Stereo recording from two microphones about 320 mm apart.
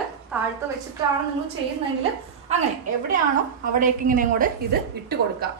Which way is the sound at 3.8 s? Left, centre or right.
Right.